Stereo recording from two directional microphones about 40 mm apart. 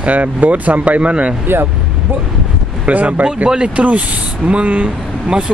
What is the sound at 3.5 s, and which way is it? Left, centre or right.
Speech, right.